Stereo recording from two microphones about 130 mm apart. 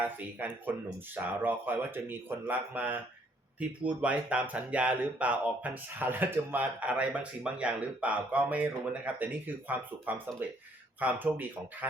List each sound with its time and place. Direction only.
0.0 s speech: 15° right (ahead or behind)